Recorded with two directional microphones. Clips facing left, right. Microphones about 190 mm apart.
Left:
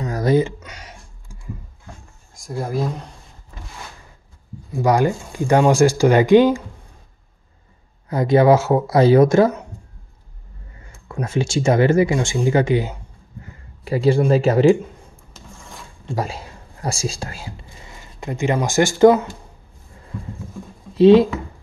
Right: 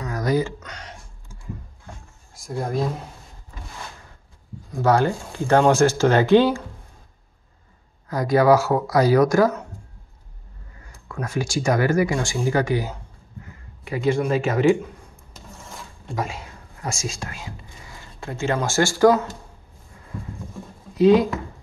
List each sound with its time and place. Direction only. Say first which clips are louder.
0.0 s a sound: left 5 dB; 25° left (ahead or behind)
0.6 s a sound: right 1 dB; 10° left (ahead or behind)
2.3 s speech: left 1 dB; centre (ahead or behind)
4.6 s speech: left 2 dB; 15° left (ahead or behind)
8.1 s speech: left 3 dB; 25° left (ahead or behind)
11.1 s speech: left 4 dB; 25° left (ahead or behind)
13.8 s speech: left 5 dB; 35° left (ahead or behind)
16.2 s whispering: left 2 dB; 35° left (ahead or behind)
17.9 s speech: left 4 dB; 15° left (ahead or behind)
20.9 s speech: left 5 dB; 30° left (ahead or behind)